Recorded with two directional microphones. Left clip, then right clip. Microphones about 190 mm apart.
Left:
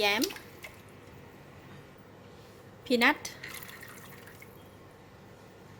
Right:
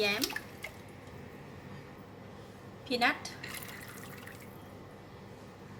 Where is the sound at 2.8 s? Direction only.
55° left (ahead or behind).